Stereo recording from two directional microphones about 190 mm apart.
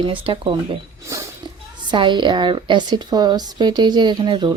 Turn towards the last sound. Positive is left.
turn(degrees=-25)  # may be behind; listen again after turning